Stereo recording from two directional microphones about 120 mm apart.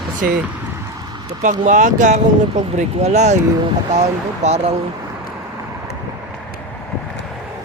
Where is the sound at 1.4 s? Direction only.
90° right; by 3.4 s 75° right (ahead or behind).